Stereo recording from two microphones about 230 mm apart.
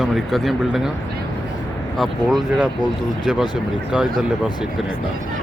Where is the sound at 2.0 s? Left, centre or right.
Centre.